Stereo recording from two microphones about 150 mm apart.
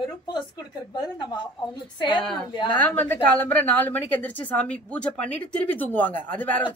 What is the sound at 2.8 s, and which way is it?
A woman's voice, 10° left (ahead or behind).